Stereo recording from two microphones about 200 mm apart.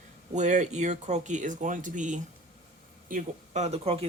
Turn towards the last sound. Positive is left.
turn(degrees=-30)  # may be behind; listen again after turning